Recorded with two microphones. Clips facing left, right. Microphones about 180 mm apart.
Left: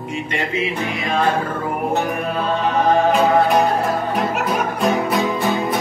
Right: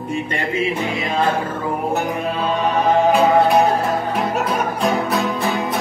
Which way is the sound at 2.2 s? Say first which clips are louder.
Even; 20° right (ahead or behind).